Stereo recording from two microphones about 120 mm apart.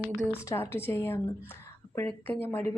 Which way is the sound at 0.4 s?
20° left (ahead or behind).